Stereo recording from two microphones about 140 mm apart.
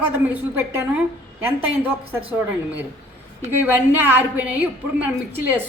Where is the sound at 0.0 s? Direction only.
15° right (ahead or behind).